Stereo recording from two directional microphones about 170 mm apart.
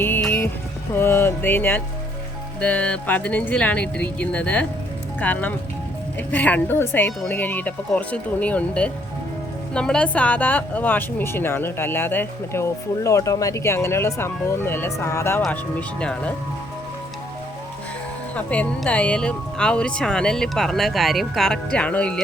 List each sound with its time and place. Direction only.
0.0 s music: 10° left (ahead or behind)
0.9 s a woman's voice: 15° left (ahead or behind)
18.3 s speech: 10° left (ahead or behind)